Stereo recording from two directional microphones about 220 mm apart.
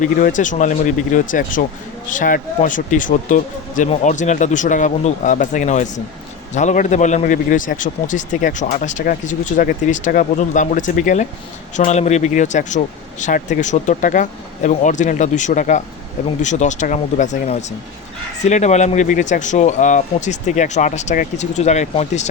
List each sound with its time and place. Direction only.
0.0 s a man's voice: 35° left (ahead or behind)